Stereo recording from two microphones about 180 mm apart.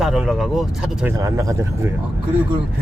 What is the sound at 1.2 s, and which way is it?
Speech, 15° right (ahead or behind).